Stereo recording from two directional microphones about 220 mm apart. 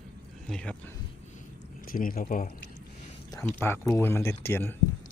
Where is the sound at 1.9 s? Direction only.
40° left (ahead or behind).